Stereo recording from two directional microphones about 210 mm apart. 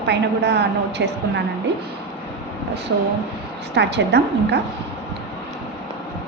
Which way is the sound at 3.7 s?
55° right (ahead or behind).